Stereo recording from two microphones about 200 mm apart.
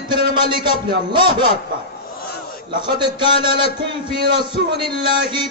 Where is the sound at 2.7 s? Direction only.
25° right (ahead or behind).